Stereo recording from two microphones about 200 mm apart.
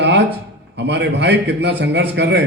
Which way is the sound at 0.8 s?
60° right (ahead or behind).